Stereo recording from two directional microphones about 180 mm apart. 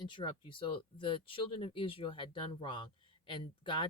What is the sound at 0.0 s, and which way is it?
Speech, 25° left (ahead or behind).